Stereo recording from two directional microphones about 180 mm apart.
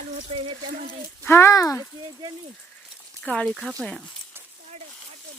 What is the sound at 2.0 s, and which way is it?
Speech, 25° right (ahead or behind).